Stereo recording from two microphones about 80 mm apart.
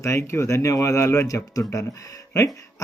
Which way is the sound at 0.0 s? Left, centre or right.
Left.